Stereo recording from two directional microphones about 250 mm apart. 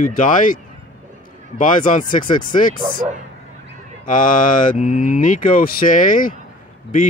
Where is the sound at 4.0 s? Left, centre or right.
Left.